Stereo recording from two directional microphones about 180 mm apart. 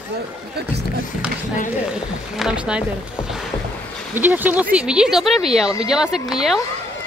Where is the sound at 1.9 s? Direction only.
5° right (ahead or behind).